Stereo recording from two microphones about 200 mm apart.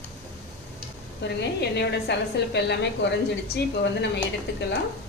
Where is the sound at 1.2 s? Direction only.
60° left (ahead or behind).